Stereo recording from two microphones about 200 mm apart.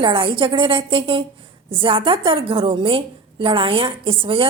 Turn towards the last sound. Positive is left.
turn(degrees=-25)  # may be behind; listen again after turning